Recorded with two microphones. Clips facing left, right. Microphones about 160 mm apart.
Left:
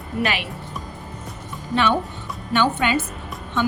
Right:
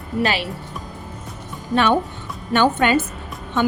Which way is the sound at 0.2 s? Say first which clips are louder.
Right 3 dB; 35° right (ahead or behind).